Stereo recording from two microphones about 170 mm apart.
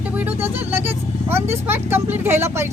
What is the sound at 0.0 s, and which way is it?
Speech, 10° right (ahead or behind).